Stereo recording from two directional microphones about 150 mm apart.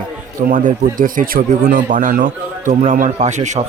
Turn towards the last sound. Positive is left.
turn(degrees=-50)  # may be behind; listen again after turning